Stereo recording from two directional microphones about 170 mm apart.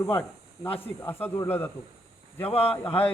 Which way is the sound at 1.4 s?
10° left (ahead or behind).